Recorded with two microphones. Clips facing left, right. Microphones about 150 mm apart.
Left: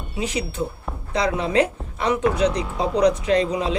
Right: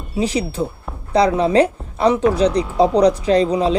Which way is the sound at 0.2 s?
35° right (ahead or behind).